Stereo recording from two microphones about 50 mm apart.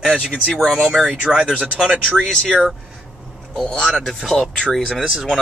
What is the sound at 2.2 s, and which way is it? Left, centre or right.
Speech, centre.